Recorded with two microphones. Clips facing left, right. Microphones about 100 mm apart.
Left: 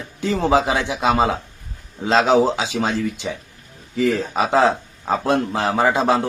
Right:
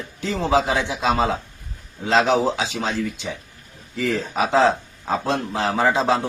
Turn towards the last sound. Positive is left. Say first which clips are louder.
# left 2 dB
turn(degrees=15)  # may be behind; listen again after turning